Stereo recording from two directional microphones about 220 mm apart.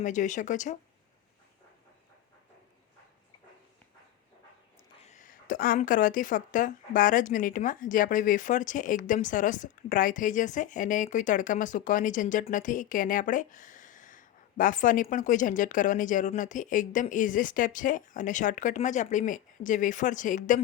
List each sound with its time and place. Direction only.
0.0 s speech: 35° left (ahead or behind)
5.0 s speech: 35° left (ahead or behind)